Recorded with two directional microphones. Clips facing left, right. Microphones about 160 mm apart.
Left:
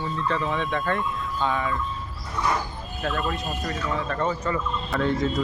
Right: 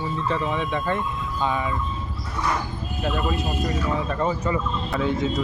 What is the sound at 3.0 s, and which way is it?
Speech, 10° right (ahead or behind).